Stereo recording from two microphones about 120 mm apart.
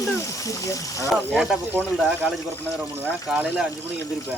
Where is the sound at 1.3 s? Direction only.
10° right (ahead or behind).